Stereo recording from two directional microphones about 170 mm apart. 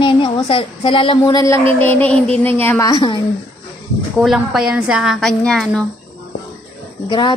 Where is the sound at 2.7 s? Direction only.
20° left (ahead or behind).